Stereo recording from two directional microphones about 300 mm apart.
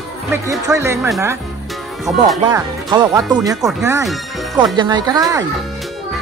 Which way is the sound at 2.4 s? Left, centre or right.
Centre.